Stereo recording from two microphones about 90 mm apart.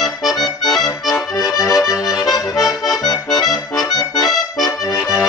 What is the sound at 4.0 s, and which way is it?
Accordion, centre (ahead or behind).